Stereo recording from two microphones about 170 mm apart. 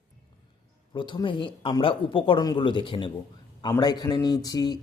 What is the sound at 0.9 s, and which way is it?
A man's voice, 25° left (ahead or behind).